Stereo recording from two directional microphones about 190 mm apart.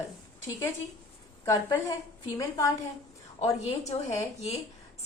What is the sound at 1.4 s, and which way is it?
A woman's voice, 15° left (ahead or behind).